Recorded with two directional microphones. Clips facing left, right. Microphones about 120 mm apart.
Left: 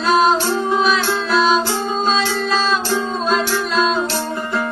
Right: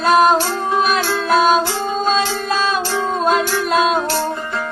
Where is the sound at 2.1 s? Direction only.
55° right (ahead or behind).